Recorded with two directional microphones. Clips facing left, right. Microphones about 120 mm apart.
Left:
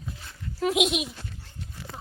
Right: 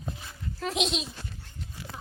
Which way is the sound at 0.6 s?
10° left (ahead or behind).